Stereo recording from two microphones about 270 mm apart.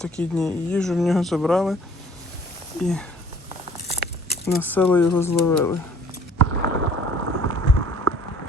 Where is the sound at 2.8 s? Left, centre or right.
Centre.